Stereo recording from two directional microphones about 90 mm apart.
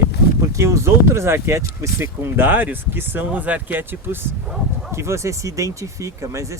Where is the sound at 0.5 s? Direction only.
35° right (ahead or behind).